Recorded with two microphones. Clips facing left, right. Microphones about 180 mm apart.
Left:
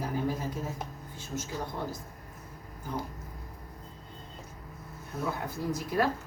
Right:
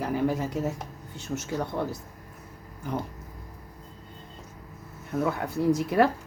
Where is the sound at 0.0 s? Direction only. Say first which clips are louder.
Right 5 dB; 75° right (ahead or behind).